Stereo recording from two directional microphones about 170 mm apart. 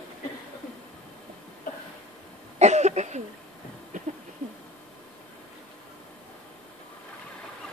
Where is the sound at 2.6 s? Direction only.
40° right (ahead or behind).